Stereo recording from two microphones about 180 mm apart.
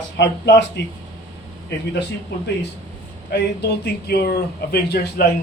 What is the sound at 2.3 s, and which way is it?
Speech, 70° left (ahead or behind).